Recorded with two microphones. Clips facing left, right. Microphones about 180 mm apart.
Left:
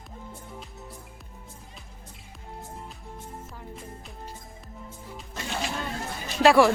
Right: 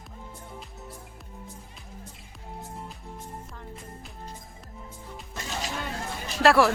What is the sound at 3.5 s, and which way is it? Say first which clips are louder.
Music: left 1 dB; centre (ahead or behind).